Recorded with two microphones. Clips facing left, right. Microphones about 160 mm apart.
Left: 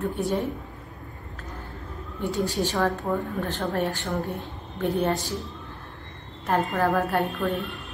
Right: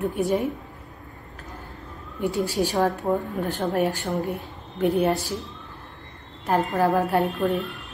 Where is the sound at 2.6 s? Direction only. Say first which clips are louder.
Right 4 dB; 15° right (ahead or behind).